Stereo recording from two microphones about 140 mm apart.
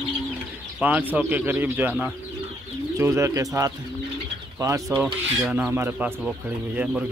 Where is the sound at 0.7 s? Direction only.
10° right (ahead or behind).